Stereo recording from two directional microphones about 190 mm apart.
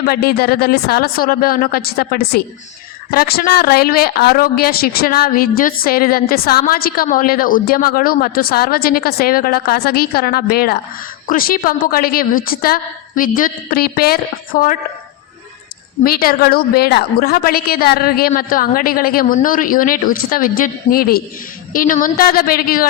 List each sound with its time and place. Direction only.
0.0 s a woman's voice: 55° left (ahead or behind)
16.0 s a woman's voice: 50° left (ahead or behind)